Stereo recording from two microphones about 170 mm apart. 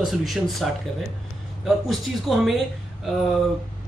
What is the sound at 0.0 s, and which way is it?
Speech, centre (ahead or behind).